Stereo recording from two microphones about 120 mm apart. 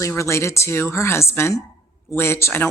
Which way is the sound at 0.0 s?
25° left (ahead or behind).